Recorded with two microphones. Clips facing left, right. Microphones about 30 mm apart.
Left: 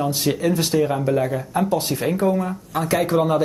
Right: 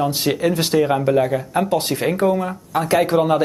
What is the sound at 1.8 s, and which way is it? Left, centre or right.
Speech, right.